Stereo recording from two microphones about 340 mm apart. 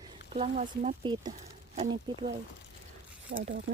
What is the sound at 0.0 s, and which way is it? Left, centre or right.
Speech, centre.